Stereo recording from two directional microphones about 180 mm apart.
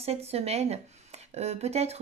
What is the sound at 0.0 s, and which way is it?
Speech, 35° right (ahead or behind).